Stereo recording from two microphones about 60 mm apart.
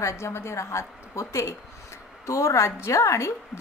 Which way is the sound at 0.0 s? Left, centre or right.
Left.